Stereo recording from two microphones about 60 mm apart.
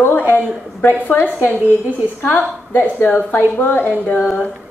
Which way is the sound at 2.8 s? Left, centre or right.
Left.